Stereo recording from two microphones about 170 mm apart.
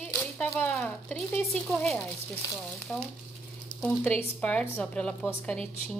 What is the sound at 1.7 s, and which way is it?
Frying, centre (ahead or behind).